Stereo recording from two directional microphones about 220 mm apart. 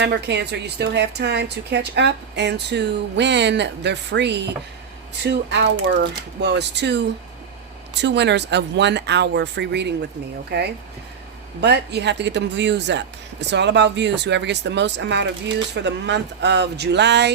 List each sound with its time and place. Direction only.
0.0 s speech: 50° right (ahead or behind)
8.0 s speech: 50° right (ahead or behind)